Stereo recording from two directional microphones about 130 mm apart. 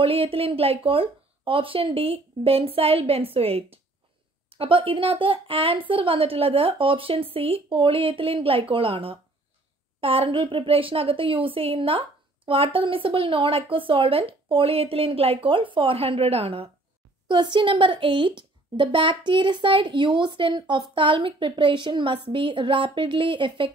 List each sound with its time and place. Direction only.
0.0 s a woman's voice: 45° right (ahead or behind)